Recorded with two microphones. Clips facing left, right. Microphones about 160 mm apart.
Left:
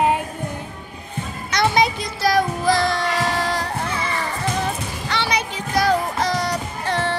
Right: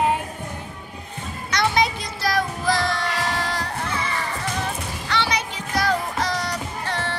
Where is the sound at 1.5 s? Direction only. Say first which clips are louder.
Left 3 dB; 15° left (ahead or behind).